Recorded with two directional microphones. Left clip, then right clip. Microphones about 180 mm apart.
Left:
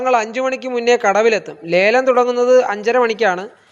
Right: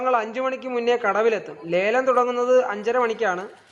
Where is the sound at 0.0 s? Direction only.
25° left (ahead or behind).